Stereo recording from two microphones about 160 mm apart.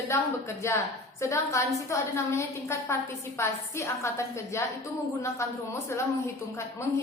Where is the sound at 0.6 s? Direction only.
15° left (ahead or behind).